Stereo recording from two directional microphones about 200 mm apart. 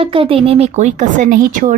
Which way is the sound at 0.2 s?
30° right (ahead or behind).